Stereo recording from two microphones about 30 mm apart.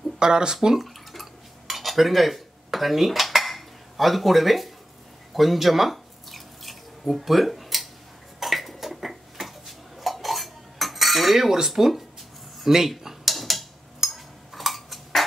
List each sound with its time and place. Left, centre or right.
0.2 s speech: right
0.7 s dishes: centre
5.3 s drip: centre
8.4 s dishes: centre
11.7 s speech: centre
13.0 s mechanisms: centre
14.0 s cutlery: centre